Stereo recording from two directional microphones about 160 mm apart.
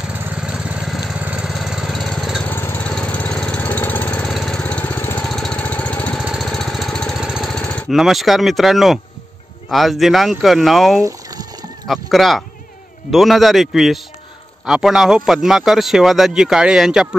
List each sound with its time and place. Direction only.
0.1 s vehicle: 10° right (ahead or behind)
2.4 s engine: 15° left (ahead or behind)
9.7 s a man's voice: centre (ahead or behind)
11.1 s boiling: 20° right (ahead or behind)
11.9 s a man's voice: centre (ahead or behind)